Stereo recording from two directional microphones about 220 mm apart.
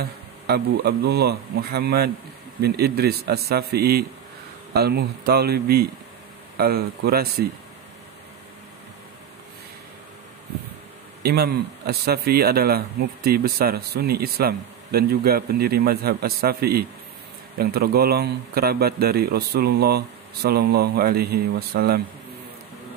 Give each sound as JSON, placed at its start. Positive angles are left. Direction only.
{"t": 0.0, "sound": "speech", "side_deg": -45}
{"t": 11.2, "sound": "speech", "side_deg": -45}